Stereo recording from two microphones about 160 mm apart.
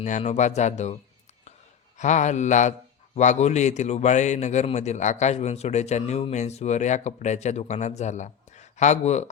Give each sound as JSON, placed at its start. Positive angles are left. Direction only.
{"t": 0.0, "sound": "a man's voice", "side_deg": 45}
{"t": 2.0, "sound": "a man's voice", "side_deg": 50}